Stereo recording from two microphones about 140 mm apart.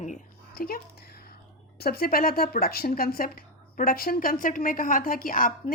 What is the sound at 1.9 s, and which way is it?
Speech, 90° left.